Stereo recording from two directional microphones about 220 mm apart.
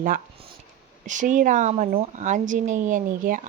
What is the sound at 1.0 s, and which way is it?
A woman's voice, 35° right (ahead or behind).